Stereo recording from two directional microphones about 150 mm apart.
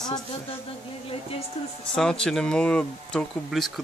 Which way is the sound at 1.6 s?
40° left (ahead or behind).